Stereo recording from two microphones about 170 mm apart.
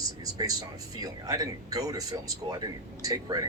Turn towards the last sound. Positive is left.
turn(degrees=-20)  # may be behind; listen again after turning